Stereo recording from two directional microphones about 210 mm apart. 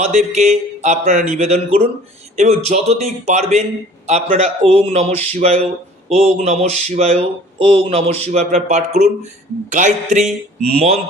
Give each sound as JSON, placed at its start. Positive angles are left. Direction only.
{"t": 0.0, "sound": "speech", "side_deg": -30}